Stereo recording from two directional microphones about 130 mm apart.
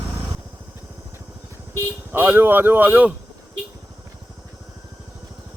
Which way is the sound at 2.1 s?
15° right (ahead or behind).